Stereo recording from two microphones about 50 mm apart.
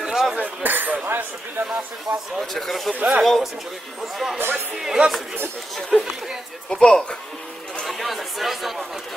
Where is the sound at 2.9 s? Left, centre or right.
Right.